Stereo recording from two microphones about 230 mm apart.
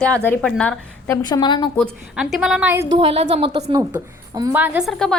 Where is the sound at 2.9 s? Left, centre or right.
Right; by 5.1 s centre.